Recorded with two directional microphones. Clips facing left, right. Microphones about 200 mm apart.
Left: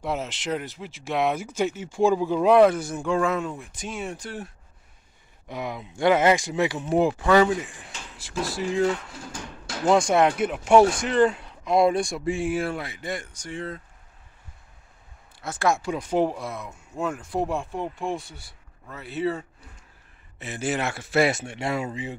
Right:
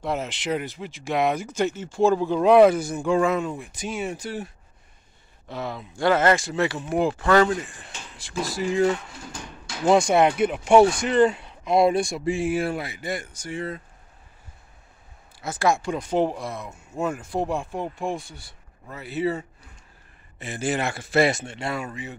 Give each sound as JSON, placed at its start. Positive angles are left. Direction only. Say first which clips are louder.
{"t": 0.0, "sound": "speech", "louder": "right 1 dB", "side_deg": 5}
{"t": 5.5, "sound": "speech", "louder": "even", "side_deg": 15}
{"t": 15.4, "sound": "a man's voice", "louder": "right 1 dB", "side_deg": 0}